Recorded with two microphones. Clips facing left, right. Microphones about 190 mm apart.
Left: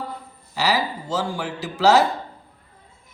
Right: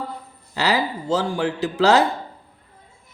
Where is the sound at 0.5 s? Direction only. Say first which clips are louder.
Right 1 dB; 60° right (ahead or behind).